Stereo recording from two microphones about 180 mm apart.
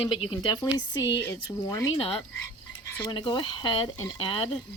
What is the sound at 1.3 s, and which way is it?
Speech, 20° left (ahead or behind).